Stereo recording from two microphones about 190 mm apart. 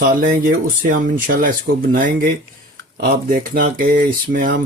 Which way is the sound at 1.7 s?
70° right (ahead or behind).